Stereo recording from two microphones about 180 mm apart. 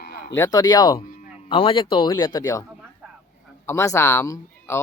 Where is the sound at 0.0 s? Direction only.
65° left (ahead or behind).